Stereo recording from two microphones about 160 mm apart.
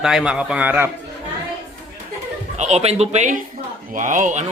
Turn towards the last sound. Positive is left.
turn(degrees=-50)  # may be behind; listen again after turning